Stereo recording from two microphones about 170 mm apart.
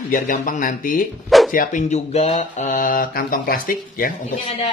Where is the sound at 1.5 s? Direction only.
50° left (ahead or behind).